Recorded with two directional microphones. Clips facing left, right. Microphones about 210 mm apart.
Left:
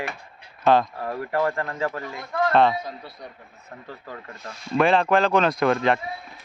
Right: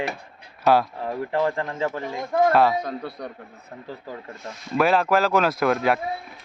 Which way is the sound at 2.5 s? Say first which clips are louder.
Left 3 dB; 5° right (ahead or behind).